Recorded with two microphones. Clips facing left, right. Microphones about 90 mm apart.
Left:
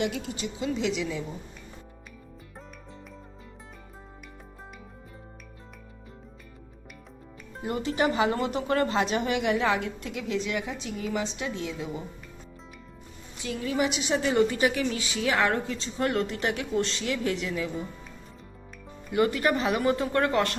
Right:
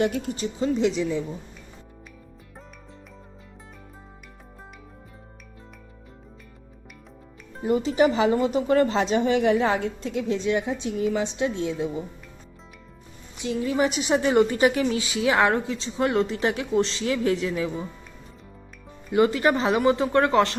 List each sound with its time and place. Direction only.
0.0 s speech: 45° right (ahead or behind)
7.7 s speech: 20° right (ahead or behind)
13.3 s a woman's voice: 20° right (ahead or behind)
13.7 s speech: 40° right (ahead or behind)
19.1 s speech: 25° right (ahead or behind)